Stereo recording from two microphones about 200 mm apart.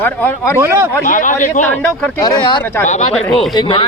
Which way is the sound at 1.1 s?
40° left (ahead or behind).